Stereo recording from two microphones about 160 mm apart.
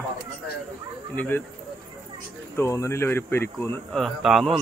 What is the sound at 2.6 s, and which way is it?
Speech, 20° left (ahead or behind).